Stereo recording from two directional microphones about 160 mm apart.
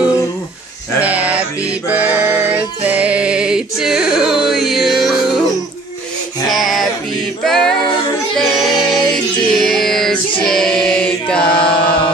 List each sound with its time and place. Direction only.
1.0 s music: 10° right (ahead or behind)
6.5 s music: centre (ahead or behind)
7.4 s a capella: centre (ahead or behind)
8.4 s music: centre (ahead or behind)
10.4 s chant: 5° left (ahead or behind)
11.6 s chant: 30° left (ahead or behind)